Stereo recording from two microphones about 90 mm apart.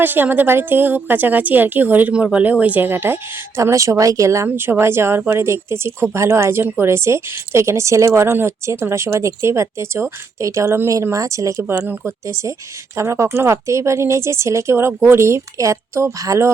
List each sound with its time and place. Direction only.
0.0 s a woman's voice: 20° right (ahead or behind)
4.4 s a woman's voice: 25° right (ahead or behind)